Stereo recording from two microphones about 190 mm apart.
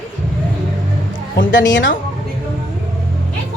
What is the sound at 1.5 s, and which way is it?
Speech, 75° left (ahead or behind).